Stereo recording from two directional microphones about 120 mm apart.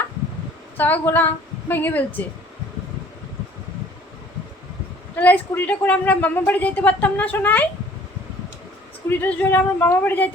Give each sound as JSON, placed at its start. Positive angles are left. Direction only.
{"t": 0.8, "sound": "a woman's voice", "side_deg": 15}
{"t": 5.1, "sound": "a woman's voice", "side_deg": 15}
{"t": 9.0, "sound": "a woman's voice", "side_deg": 15}